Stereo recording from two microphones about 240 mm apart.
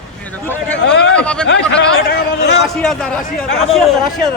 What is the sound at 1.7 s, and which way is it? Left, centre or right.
Speech, left.